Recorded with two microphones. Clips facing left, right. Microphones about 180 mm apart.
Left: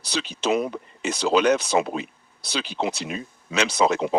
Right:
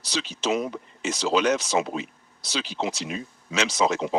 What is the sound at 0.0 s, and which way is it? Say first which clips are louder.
Speech: left 2 dB; 60° left (ahead or behind).